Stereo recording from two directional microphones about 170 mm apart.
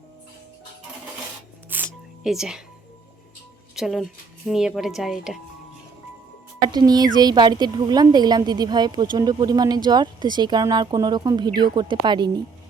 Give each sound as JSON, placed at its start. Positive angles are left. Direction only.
{"t": 1.7, "sound": "music", "side_deg": -5}
{"t": 3.8, "sound": "speech", "side_deg": 0}
{"t": 6.7, "sound": "a woman's voice", "side_deg": -25}